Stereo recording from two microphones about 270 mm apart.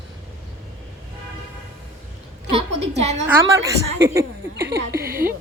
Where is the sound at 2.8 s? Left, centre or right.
Right.